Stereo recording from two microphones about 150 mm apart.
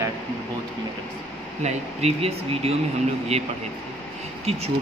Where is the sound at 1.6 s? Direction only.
45° right (ahead or behind).